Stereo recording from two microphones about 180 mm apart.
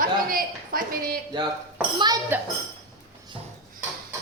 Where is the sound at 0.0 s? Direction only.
50° right (ahead or behind).